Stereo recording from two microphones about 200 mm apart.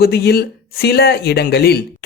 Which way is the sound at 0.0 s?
50° left (ahead or behind).